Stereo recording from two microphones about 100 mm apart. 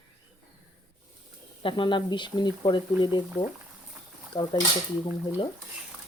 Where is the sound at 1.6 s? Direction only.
50° left (ahead or behind).